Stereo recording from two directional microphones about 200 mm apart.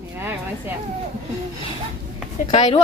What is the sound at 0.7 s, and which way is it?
Speech, 10° right (ahead or behind).